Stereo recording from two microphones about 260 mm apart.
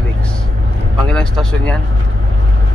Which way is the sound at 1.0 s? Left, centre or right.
Centre.